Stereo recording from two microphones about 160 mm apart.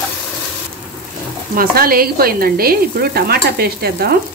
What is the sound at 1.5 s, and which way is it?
Sizzle, 65° right (ahead or behind).